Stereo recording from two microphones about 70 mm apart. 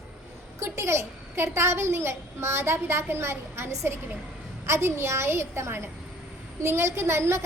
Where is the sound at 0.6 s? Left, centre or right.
Right.